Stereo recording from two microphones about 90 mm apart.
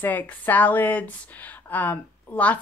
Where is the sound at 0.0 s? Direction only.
20° left (ahead or behind).